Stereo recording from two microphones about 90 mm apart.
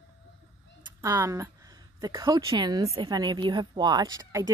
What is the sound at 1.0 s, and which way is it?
Speech, 35° right (ahead or behind).